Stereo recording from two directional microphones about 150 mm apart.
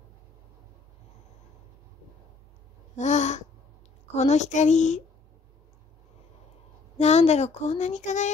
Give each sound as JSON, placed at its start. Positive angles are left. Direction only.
{"t": 3.0, "sound": "a sound", "side_deg": 55}
{"t": 4.1, "sound": "speech", "side_deg": 50}
{"t": 7.0, "sound": "speech", "side_deg": 45}